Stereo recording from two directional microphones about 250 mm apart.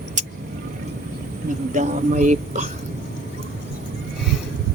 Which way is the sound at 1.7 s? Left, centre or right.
Right.